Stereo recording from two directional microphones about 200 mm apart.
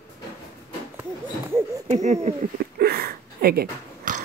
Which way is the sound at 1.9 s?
35° right (ahead or behind).